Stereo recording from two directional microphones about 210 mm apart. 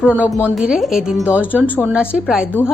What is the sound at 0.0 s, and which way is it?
Speech, 5° right (ahead or behind).